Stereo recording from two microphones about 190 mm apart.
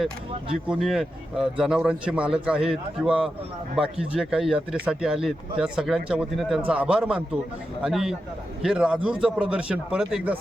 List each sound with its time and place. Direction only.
0.5 s speech: centre (ahead or behind)